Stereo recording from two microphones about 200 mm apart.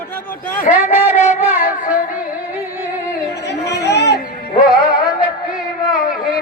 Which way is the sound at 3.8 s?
55° left (ahead or behind).